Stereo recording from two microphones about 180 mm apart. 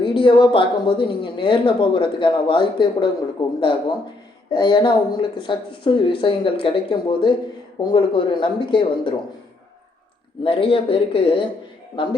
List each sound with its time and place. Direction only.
0.0 s speech: 30° left (ahead or behind)
10.4 s speech: 30° left (ahead or behind)